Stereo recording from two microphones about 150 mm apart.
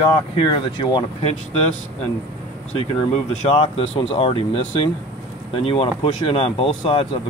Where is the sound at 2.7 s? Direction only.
45° left (ahead or behind).